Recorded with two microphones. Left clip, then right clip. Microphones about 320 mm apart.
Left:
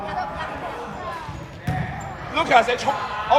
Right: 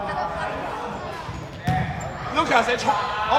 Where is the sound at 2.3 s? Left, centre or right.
Left.